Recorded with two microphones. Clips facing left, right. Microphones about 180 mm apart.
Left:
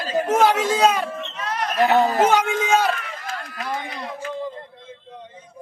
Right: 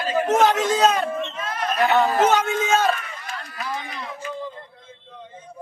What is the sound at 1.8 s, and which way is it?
Speech, 40° left (ahead or behind).